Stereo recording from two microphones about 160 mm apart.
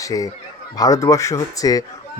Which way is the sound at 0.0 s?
20° left (ahead or behind).